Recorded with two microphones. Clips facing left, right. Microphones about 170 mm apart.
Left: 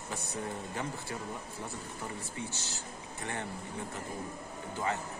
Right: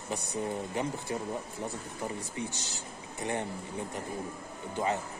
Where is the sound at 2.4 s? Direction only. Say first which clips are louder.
Right 3 dB; 15° right (ahead or behind).